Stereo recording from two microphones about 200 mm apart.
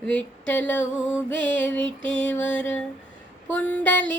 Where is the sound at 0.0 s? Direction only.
5° left (ahead or behind).